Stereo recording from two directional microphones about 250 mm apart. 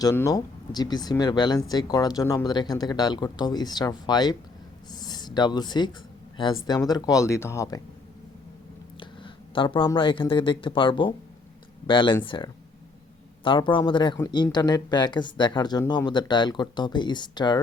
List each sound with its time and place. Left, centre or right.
0.0 s speech: centre
9.0 s speech: centre